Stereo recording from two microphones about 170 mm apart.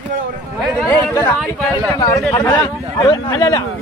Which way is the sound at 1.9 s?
20° left (ahead or behind).